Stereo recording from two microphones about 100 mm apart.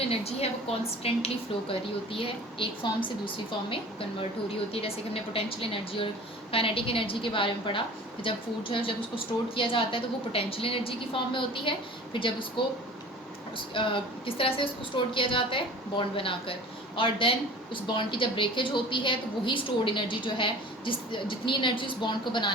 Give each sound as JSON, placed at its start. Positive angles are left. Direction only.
{"t": 0.1, "sound": "a woman's voice", "side_deg": 90}
{"t": 2.1, "sound": "a woman's voice", "side_deg": 60}
{"t": 4.7, "sound": "a woman's voice", "side_deg": 70}
{"t": 13.7, "sound": "a woman's voice", "side_deg": 60}